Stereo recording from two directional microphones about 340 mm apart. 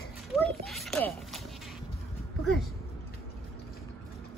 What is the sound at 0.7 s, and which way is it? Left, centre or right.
Speech, centre.